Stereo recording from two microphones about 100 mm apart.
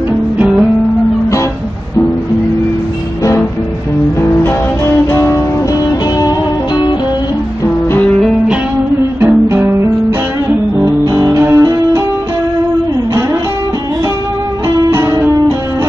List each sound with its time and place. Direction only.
0.4 s music: 10° right (ahead or behind)
5.1 s music: 30° left (ahead or behind)
5.9 s music: 40° left (ahead or behind)
9.2 s music: 25° right (ahead or behind)
11.1 s music: 35° right (ahead or behind)
14.9 s music: 30° right (ahead or behind)